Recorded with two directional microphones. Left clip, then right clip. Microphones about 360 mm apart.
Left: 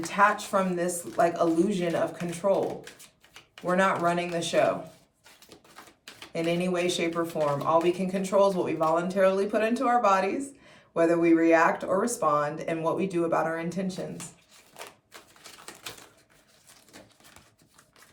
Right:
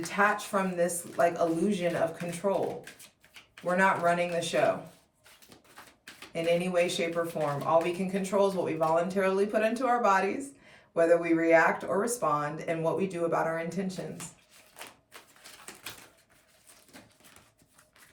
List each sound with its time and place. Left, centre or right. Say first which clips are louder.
0.0 s speech: left 4 dB; centre
6.3 s speech: right 1 dB; centre